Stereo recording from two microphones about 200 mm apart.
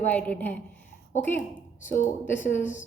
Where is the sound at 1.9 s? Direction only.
40° left (ahead or behind).